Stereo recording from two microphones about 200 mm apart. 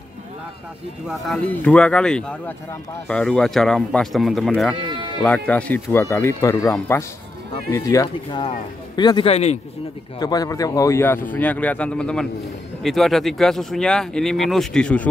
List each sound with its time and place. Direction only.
1.0 s speech: centre (ahead or behind); by 9.6 s 30° left (ahead or behind)
10.1 s speech: 20° left (ahead or behind)